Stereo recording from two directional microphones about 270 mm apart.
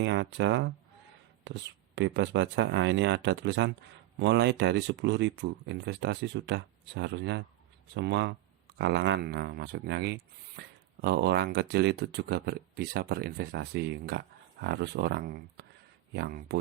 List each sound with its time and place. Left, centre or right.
0.0 s speech: right